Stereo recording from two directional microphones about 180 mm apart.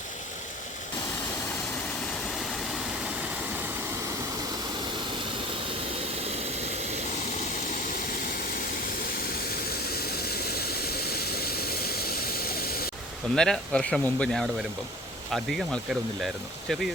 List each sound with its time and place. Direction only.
10.2 s vehicle: 60° left (ahead or behind)
13.3 s speech: 5° left (ahead or behind)